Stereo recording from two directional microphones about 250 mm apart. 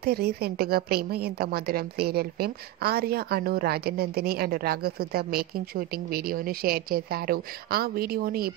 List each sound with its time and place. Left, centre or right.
0.0 s a woman's voice: right